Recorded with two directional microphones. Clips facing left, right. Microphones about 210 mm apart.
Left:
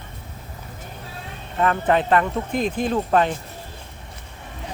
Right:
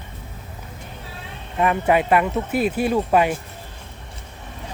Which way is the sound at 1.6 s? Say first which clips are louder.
Right 1 dB; 10° right (ahead or behind).